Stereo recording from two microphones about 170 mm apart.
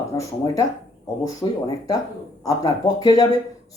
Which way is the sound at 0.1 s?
25° left (ahead or behind).